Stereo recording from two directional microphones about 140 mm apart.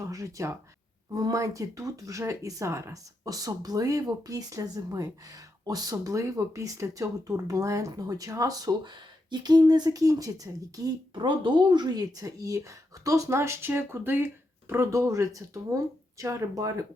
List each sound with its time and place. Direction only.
0.1 s speech: 25° right (ahead or behind)